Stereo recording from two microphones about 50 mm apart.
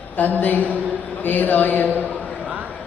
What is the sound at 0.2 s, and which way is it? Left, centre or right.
A man's voice, left.